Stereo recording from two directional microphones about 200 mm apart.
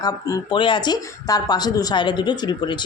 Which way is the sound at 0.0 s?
20° left (ahead or behind).